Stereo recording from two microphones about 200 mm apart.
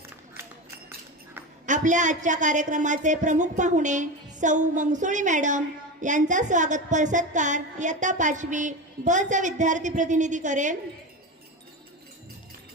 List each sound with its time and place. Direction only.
0.4 s run: 15° right (ahead or behind)
1.6 s a woman's voice: 40° right (ahead or behind)